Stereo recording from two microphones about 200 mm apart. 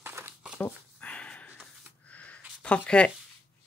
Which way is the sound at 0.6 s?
5° left (ahead or behind).